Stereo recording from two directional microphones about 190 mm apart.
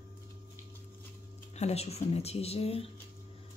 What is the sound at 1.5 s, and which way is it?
A woman's voice, 35° left (ahead or behind).